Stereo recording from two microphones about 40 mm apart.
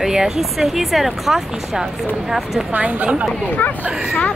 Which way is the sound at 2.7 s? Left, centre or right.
Right.